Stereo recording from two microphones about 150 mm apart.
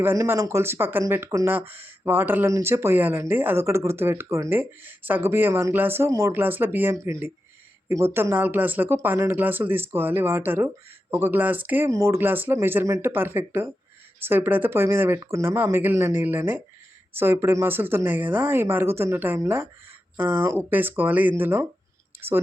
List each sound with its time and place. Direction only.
0.0 s speech: 15° right (ahead or behind)